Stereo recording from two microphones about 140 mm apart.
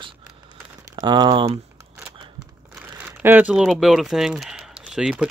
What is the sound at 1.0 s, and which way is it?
Speech, 30° right (ahead or behind).